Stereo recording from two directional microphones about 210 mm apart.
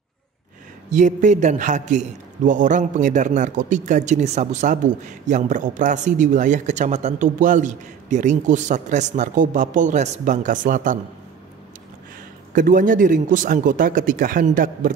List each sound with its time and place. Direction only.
0.8 s a man's voice: 35° right (ahead or behind)
12.5 s a man's voice: 40° right (ahead or behind)